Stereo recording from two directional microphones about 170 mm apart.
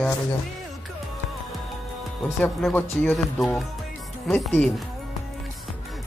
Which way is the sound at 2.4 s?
10° left (ahead or behind).